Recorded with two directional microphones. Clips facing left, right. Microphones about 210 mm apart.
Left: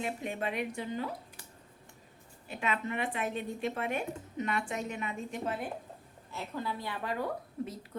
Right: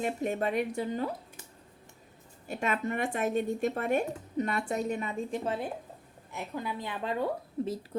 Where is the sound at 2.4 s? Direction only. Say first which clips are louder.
Right 3 dB; 45° right (ahead or behind).